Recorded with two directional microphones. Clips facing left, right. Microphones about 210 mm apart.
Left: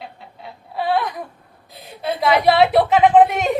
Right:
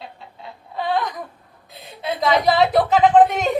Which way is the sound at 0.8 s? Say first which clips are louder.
Left 2 dB; 5° left (ahead or behind).